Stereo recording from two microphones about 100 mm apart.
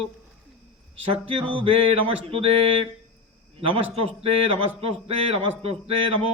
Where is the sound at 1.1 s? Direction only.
65° right (ahead or behind).